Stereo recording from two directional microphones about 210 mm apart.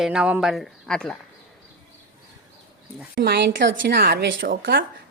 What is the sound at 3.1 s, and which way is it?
A woman's voice, 45° right (ahead or behind).